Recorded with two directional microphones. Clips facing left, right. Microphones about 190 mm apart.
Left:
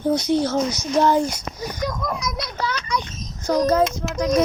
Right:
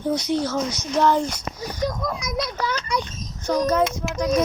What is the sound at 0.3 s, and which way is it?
Speech, 25° left (ahead or behind).